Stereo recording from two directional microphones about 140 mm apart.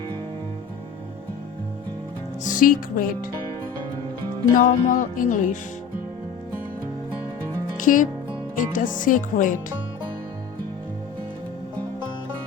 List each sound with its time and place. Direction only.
2.4 s speech: 70° left (ahead or behind)
4.5 s speech: 70° left (ahead or behind)
7.8 s speech: 70° left (ahead or behind)